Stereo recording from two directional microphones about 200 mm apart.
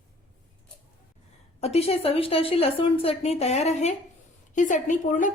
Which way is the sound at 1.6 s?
30° left (ahead or behind).